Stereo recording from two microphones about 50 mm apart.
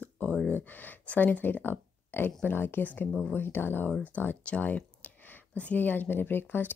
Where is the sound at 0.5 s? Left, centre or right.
Left.